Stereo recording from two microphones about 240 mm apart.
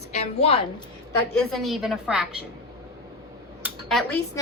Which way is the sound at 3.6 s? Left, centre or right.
Centre.